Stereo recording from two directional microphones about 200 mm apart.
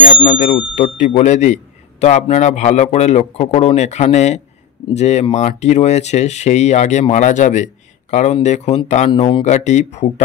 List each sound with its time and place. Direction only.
0.0 s a man's voice: 40° left (ahead or behind)
9.1 s a man's voice: 25° left (ahead or behind)